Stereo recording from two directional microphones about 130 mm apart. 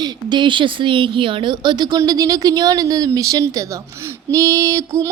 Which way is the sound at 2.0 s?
30° right (ahead or behind).